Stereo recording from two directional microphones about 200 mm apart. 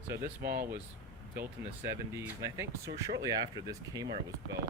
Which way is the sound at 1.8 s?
15° right (ahead or behind).